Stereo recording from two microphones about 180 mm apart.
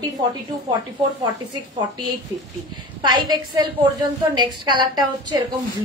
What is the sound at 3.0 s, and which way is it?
Speech, 25° right (ahead or behind).